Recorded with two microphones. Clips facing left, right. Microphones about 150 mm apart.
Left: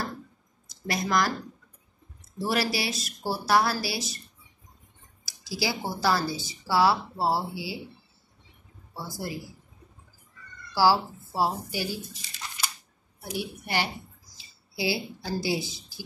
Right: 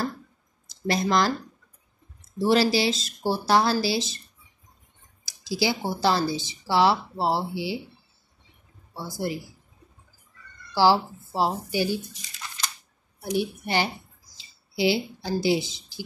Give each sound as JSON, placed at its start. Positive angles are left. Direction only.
{"t": 0.8, "sound": "speech", "side_deg": -30}
{"t": 2.3, "sound": "speech", "side_deg": -30}
{"t": 5.2, "sound": "speech", "side_deg": -20}
{"t": 9.0, "sound": "speech", "side_deg": -20}
{"t": 10.7, "sound": "speech", "side_deg": -20}
{"t": 13.4, "sound": "a woman's voice", "side_deg": -25}